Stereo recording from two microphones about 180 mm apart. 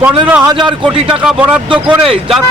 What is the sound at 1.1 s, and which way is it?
Speech, 5° right (ahead or behind).